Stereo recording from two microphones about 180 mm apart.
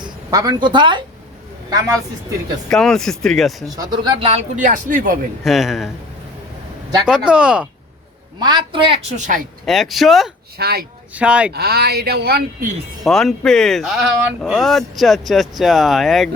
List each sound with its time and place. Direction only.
0.0 s speech: 20° right (ahead or behind)
2.6 s speech: 5° left (ahead or behind)
3.8 s a woman's voice: 25° right (ahead or behind)
4.3 s speech: 45° right (ahead or behind)
5.4 s speech: centre (ahead or behind)
7.0 s speech: 5° right (ahead or behind)
8.4 s a woman's voice: 25° right (ahead or behind)
9.1 s speech: 45° right (ahead or behind)
9.6 s speech: centre (ahead or behind)
10.6 s speech: 60° right (ahead or behind)
11.1 s speech: 5° right (ahead or behind)
11.5 s speech: 65° right (ahead or behind)
13.1 s speech: centre (ahead or behind)